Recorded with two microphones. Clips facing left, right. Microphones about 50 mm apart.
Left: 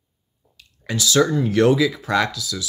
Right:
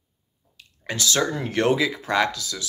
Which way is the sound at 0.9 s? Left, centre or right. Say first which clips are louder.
Left 5 dB; right.